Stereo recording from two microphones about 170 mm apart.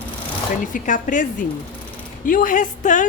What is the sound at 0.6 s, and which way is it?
A woman's voice, 55° left (ahead or behind).